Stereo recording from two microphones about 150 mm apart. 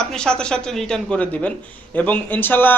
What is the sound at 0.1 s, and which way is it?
A woman's voice, 5° left (ahead or behind).